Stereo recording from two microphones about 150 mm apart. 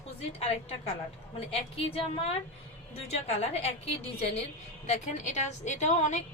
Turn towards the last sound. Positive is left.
turn(degrees=50)  # may be behind; listen again after turning